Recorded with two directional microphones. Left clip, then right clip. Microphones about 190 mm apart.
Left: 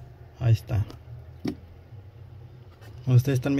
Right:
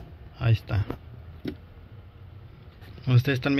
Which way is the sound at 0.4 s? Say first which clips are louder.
Right 1 dB; 10° left (ahead or behind).